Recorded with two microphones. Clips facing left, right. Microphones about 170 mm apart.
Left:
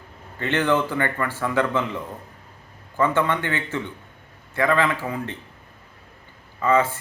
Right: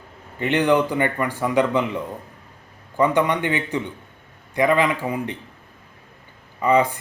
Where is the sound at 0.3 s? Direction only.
15° right (ahead or behind).